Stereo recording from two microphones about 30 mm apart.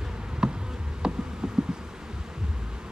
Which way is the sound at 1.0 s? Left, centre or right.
Right.